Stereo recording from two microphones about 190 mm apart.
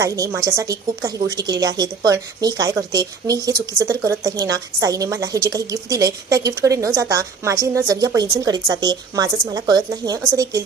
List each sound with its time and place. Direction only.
0.0 s a woman's voice: 15° right (ahead or behind)